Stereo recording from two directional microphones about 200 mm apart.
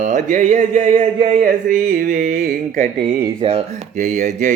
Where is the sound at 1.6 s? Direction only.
45° right (ahead or behind).